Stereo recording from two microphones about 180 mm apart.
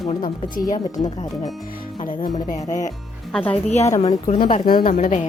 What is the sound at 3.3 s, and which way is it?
Speech, 5° left (ahead or behind).